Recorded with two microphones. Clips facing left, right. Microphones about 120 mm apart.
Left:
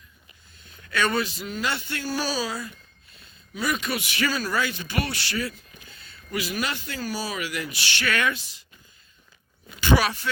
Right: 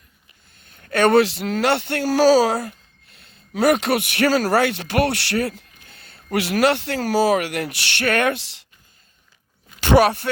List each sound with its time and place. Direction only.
0.5 s a man's voice: 55° right (ahead or behind); by 8.6 s 75° right (ahead or behind)
9.8 s speech: 60° right (ahead or behind)